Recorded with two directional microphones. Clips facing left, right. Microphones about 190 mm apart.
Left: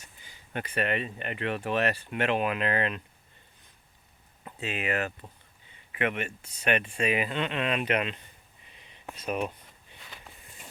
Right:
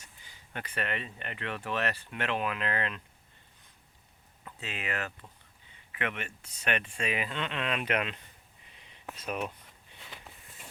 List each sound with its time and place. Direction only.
0.5 s speech: 15° left (ahead or behind)
4.4 s speech: 15° left (ahead or behind)
10.2 s walk: centre (ahead or behind)